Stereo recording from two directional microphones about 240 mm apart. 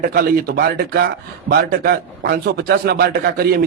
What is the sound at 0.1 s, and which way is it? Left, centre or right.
A man's voice, right.